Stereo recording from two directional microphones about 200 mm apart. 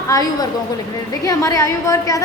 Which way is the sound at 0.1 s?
15° left (ahead or behind).